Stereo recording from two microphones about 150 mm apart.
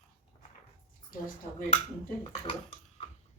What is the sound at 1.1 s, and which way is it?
Speech, 70° left (ahead or behind).